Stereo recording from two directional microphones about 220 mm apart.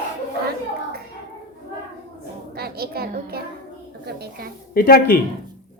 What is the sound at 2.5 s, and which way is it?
A child's voice, 45° right (ahead or behind).